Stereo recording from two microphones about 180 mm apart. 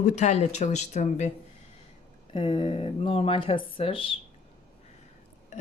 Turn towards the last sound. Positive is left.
turn(degrees=30)  # may be behind; listen again after turning